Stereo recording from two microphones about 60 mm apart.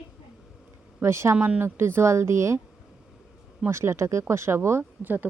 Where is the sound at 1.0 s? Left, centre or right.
Right.